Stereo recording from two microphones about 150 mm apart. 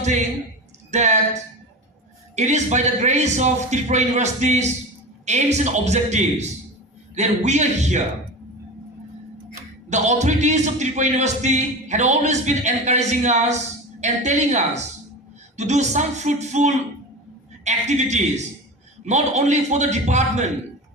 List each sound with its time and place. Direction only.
0.9 s speech: 50° right (ahead or behind)
9.9 s speech: 50° right (ahead or behind)